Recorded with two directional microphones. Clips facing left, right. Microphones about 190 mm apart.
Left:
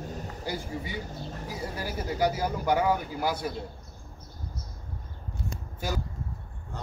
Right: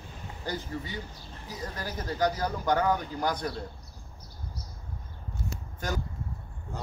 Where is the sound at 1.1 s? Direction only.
40° left (ahead or behind).